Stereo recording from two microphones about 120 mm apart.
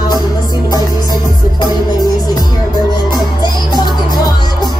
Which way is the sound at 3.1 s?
35° left (ahead or behind).